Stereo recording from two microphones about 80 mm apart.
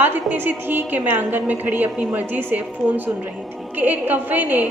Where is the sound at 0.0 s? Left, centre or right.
Right.